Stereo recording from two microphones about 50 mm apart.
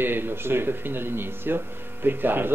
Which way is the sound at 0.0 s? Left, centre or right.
Right.